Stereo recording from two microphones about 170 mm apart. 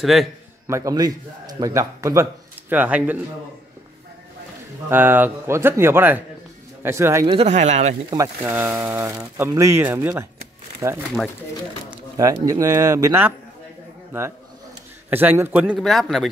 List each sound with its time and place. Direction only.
0.0 s a man's voice: centre (ahead or behind)
0.7 s a man's voice: 20° right (ahead or behind)
4.8 s a man's voice: 10° right (ahead or behind)
7.2 s speech: 35° right (ahead or behind)
8.1 s a man's voice: 15° right (ahead or behind)
12.2 s a man's voice: 20° right (ahead or behind)
15.0 s a man's voice: 10° right (ahead or behind)